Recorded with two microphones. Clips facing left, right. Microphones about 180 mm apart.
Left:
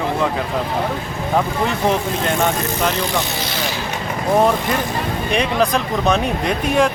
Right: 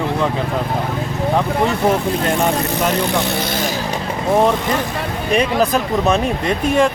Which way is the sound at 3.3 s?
50° right (ahead or behind).